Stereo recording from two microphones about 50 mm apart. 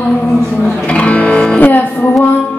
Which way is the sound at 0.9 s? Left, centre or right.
Left.